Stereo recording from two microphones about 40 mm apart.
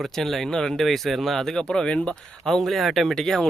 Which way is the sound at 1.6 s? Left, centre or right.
Left.